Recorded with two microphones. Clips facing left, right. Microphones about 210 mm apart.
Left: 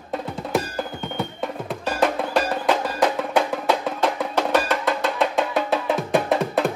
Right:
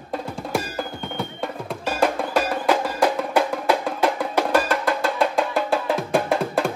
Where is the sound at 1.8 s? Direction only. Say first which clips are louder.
Even; 10° right (ahead or behind).